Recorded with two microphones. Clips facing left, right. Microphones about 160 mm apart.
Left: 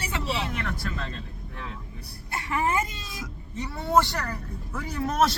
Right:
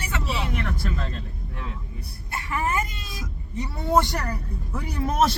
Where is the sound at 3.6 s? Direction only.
15° right (ahead or behind).